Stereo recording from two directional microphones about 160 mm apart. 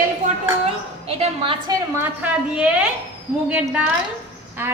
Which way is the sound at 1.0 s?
40° right (ahead or behind).